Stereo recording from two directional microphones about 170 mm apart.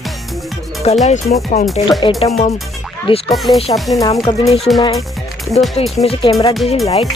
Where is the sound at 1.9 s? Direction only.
30° left (ahead or behind).